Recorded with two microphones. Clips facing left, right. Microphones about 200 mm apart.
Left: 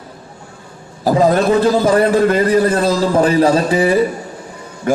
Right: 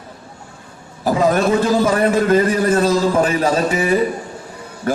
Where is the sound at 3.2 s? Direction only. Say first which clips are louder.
Left 4 dB; 35° left (ahead or behind).